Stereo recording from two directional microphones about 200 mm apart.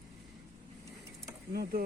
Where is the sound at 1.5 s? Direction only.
50° right (ahead or behind).